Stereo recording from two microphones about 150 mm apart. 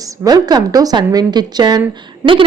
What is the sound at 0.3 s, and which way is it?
A woman's voice, 25° right (ahead or behind).